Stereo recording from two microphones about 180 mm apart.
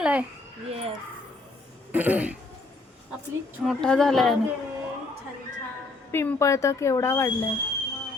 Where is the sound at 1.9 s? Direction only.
10° right (ahead or behind).